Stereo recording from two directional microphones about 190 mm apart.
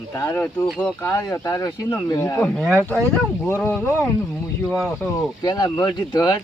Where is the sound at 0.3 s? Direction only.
5° left (ahead or behind).